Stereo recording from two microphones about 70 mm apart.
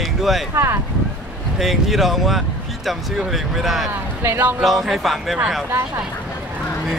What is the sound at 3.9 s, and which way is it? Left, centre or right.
Speech, right.